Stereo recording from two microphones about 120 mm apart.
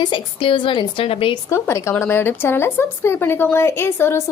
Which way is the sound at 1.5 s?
25° left (ahead or behind).